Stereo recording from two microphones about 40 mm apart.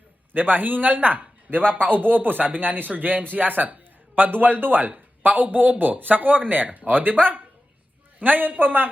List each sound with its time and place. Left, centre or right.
0.3 s speech: right
8.2 s speech: right